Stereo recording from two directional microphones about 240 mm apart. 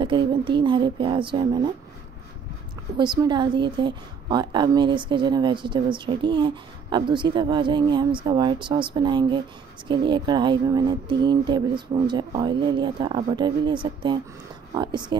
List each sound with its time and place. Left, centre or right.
0.0 s a woman's voice: right
3.0 s a woman's voice: centre